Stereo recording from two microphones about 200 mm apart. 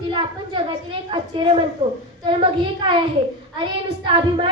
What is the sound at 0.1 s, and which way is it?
A woman's voice, 25° right (ahead or behind).